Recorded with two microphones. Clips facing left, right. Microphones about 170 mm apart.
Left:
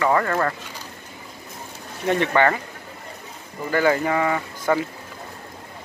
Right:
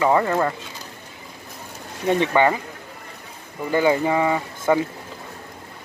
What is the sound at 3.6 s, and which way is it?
Speech, 20° right (ahead or behind).